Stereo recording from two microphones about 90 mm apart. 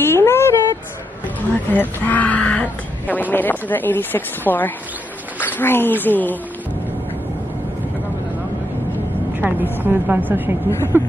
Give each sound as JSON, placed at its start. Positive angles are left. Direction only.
{"t": 0.0, "sound": "a sound", "side_deg": 25}
{"t": 1.5, "sound": "speech", "side_deg": 20}
{"t": 9.4, "sound": "a woman's voice", "side_deg": -20}